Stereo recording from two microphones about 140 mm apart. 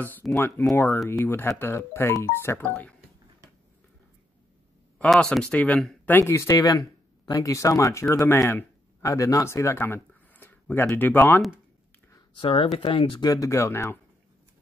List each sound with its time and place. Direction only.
0.4 s speech: 15° left (ahead or behind)
4.9 s speech: 5° left (ahead or behind)
12.4 s speech: 40° left (ahead or behind)
13.3 s speech: 25° left (ahead or behind)